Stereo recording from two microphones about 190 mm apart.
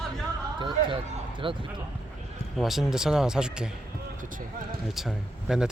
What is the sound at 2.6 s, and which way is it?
Speech, centre (ahead or behind).